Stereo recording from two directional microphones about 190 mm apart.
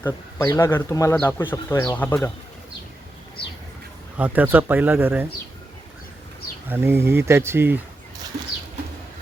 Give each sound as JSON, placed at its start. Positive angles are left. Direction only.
{"t": 0.0, "sound": "a man's voice", "side_deg": 15}
{"t": 4.2, "sound": "speech", "side_deg": -10}
{"t": 6.7, "sound": "speech", "side_deg": -10}